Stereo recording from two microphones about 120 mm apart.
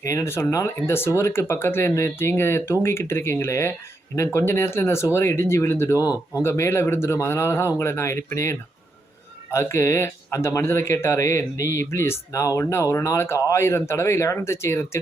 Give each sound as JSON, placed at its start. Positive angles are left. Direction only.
{"t": 0.0, "sound": "speech", "side_deg": 25}